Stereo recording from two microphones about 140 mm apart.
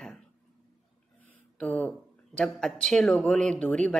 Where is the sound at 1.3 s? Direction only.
10° left (ahead or behind).